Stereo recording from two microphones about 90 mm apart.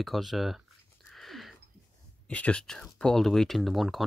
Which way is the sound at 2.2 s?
15° left (ahead or behind).